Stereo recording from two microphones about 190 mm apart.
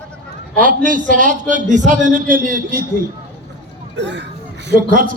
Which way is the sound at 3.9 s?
65° right (ahead or behind).